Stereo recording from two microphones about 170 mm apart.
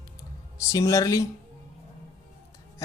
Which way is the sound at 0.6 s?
20° left (ahead or behind).